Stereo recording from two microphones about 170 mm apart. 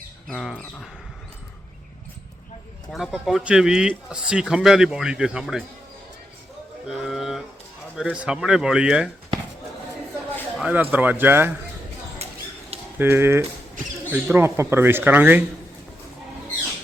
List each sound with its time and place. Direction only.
0.3 s speech: centre (ahead or behind)
2.9 s speech: centre (ahead or behind)
6.8 s a sound: centre (ahead or behind)
7.9 s speech: 5° right (ahead or behind)
10.6 s speech: 10° right (ahead or behind)
12.2 s a sound: 40° right (ahead or behind)
13.0 s speech: 15° right (ahead or behind)